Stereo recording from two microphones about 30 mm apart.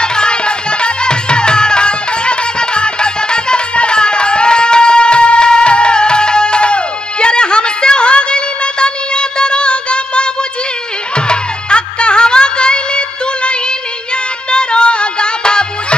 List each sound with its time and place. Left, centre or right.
0.0 s music: left